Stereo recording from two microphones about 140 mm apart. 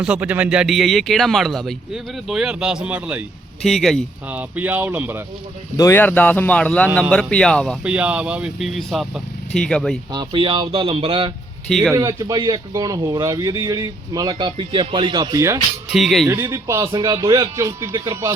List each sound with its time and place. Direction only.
0.0 s speech: 10° right (ahead or behind)
3.6 s speech: centre (ahead or behind)
4.3 s speech: 10° right (ahead or behind)
5.7 s speech: 20° left (ahead or behind); by 7.8 s 5° left (ahead or behind)
7.9 s speech: 10° right (ahead or behind)
10.1 s speech: 35° right (ahead or behind)
11.7 s speech: centre (ahead or behind)
11.9 s speech: 25° right (ahead or behind)
15.9 s speech: centre (ahead or behind)
16.2 s speech: 20° right (ahead or behind)